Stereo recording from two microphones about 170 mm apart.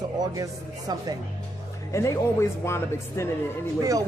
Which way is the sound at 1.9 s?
15° left (ahead or behind).